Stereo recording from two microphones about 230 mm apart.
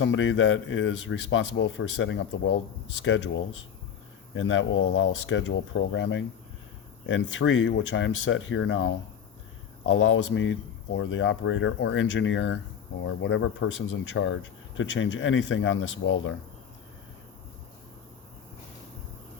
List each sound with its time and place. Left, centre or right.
0.0 s speech: left